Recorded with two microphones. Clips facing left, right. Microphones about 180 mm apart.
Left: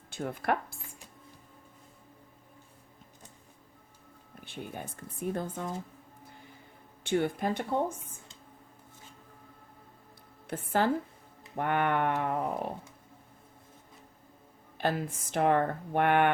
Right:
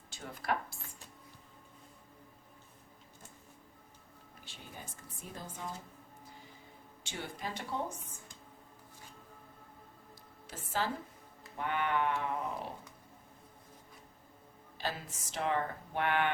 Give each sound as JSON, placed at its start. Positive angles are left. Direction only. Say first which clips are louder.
{"t": 0.1, "sound": "speech", "louder": "left 6 dB", "side_deg": 55}
{"t": 4.4, "sound": "speech", "louder": "left 10 dB", "side_deg": 60}
{"t": 7.0, "sound": "speech", "louder": "left 13 dB", "side_deg": 55}
{"t": 10.4, "sound": "speech", "louder": "left 8 dB", "side_deg": 55}
{"t": 14.8, "sound": "speech", "louder": "left 9 dB", "side_deg": 55}